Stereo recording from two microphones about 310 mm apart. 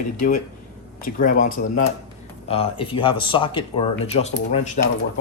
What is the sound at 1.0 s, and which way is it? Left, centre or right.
A man's voice, left.